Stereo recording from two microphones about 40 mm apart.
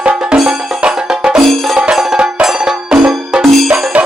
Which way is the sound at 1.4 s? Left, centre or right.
Centre.